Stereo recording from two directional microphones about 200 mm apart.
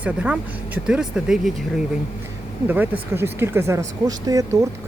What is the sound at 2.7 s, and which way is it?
Speech, 10° right (ahead or behind).